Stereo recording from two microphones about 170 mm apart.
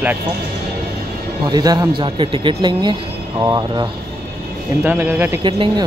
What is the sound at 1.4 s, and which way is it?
A man's voice, 20° right (ahead or behind).